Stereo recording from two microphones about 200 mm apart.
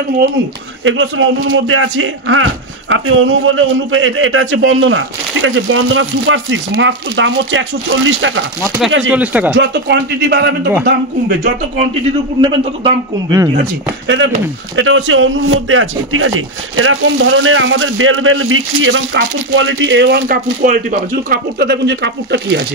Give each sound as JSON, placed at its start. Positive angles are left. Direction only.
{"t": 0.8, "sound": "a man's voice", "side_deg": -75}
{"t": 9.1, "sound": "speech", "side_deg": -5}
{"t": 9.6, "sound": "a man's voice", "side_deg": -60}
{"t": 12.4, "sound": "a man's voice", "side_deg": -20}
{"t": 14.0, "sound": "a man's voice", "side_deg": -65}